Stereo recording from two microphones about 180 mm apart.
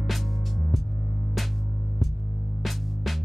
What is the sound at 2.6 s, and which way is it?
Music, centre (ahead or behind).